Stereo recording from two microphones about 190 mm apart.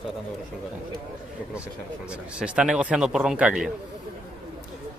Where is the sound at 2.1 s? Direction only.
5° right (ahead or behind).